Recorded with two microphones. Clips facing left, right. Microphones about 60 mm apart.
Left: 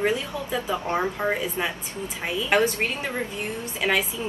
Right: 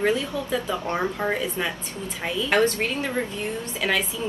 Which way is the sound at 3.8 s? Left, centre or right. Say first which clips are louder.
Left 1 dB; centre.